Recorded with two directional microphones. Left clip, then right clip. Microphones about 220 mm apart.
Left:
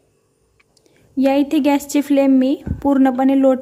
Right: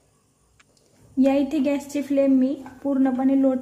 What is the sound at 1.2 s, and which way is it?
A woman's voice, 35° left (ahead or behind).